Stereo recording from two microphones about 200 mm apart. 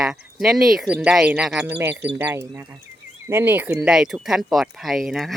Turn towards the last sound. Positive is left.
turn(degrees=0)  # may be behind; listen again after turning